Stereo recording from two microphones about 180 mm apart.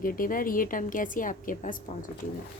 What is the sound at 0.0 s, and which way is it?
A woman's voice, 50° left (ahead or behind).